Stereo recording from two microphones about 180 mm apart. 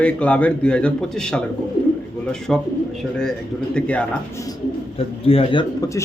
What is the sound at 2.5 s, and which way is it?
Speech, centre (ahead or behind).